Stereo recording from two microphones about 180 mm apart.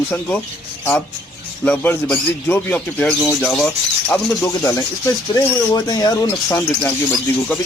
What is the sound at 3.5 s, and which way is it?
Speech, 5° left (ahead or behind).